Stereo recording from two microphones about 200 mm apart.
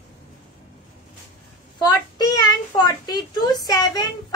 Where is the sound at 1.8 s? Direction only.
20° left (ahead or behind).